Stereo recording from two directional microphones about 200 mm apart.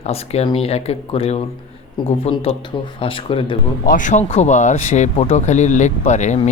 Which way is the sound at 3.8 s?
40° left (ahead or behind).